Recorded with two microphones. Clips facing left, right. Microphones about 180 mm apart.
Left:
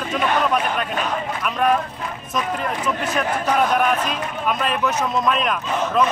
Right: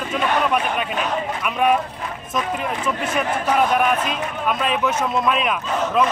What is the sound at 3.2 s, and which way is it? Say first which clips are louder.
A man's voice: right 1 dB; 5° right (ahead or behind).